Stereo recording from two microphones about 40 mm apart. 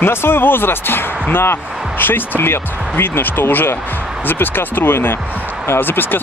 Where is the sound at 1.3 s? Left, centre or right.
Left.